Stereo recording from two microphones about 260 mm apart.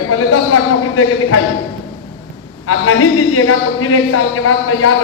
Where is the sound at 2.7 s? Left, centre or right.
Left.